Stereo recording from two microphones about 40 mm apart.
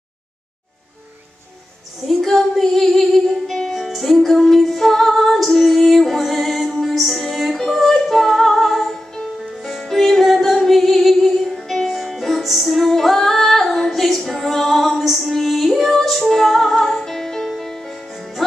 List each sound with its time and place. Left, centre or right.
2.0 s female singing: centre
3.4 s music: centre
18.1 s music: centre